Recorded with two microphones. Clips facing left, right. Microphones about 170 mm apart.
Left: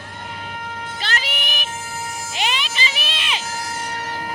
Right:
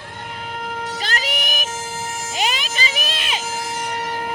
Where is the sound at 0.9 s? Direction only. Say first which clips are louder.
Left 1 dB; 40° right (ahead or behind).